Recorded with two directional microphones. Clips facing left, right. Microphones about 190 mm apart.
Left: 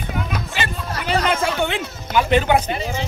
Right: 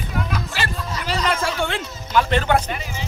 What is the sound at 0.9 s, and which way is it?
Chatter, 60° left (ahead or behind).